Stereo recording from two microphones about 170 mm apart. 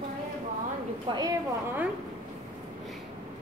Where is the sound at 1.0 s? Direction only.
25° right (ahead or behind).